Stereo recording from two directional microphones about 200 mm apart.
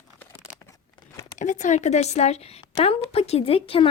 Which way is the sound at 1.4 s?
40° left (ahead or behind).